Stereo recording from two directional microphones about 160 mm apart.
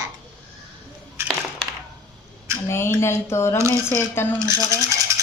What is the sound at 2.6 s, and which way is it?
Speech, 15° left (ahead or behind).